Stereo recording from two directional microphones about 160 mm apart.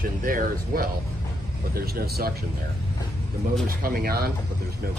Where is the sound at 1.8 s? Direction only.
75° right (ahead or behind).